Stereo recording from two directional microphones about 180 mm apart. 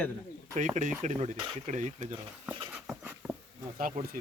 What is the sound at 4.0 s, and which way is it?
Speech, 40° right (ahead or behind).